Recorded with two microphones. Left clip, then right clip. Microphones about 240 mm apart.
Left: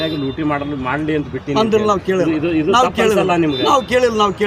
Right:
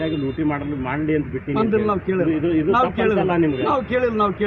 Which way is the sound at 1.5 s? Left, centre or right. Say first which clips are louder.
Left 6 dB; left.